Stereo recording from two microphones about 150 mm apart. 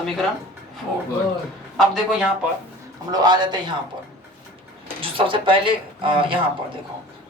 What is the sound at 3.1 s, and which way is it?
Speech, 30° right (ahead or behind).